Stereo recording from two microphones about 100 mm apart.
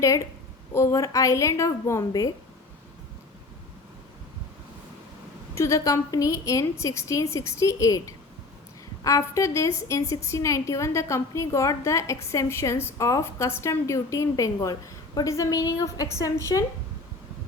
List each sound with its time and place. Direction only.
0.7 s a woman's voice: 30° left (ahead or behind)
5.5 s a woman's voice: 30° left (ahead or behind)